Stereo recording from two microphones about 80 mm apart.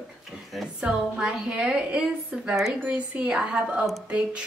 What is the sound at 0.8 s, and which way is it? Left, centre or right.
A woman's voice, centre.